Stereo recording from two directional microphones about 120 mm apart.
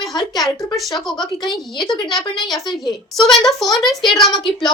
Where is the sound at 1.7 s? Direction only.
35° left (ahead or behind).